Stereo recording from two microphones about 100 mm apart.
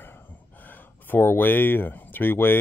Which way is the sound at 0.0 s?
20° left (ahead or behind).